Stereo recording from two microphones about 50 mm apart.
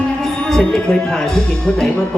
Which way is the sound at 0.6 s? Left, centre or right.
Centre.